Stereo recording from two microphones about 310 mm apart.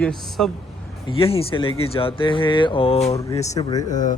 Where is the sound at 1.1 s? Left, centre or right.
Centre.